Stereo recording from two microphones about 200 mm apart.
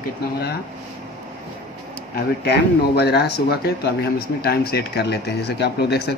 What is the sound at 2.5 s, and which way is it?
Speech, 55° left (ahead or behind).